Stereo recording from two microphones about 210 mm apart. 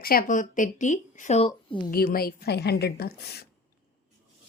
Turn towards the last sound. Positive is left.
turn(degrees=50)  # may be behind; listen again after turning